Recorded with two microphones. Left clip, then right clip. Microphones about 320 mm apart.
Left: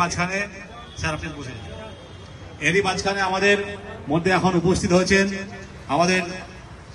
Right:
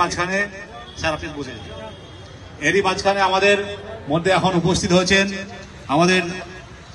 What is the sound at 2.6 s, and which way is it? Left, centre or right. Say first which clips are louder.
A man's voice: right 2 dB; right.